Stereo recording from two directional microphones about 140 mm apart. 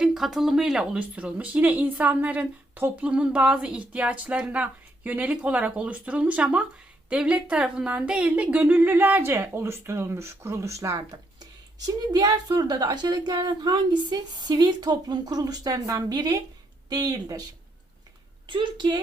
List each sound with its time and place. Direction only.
0.0 s a woman's voice: 5° right (ahead or behind); by 17.4 s 25° right (ahead or behind)
18.4 s a woman's voice: 35° right (ahead or behind)